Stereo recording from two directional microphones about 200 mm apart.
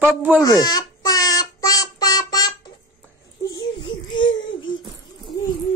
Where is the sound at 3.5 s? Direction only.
25° left (ahead or behind).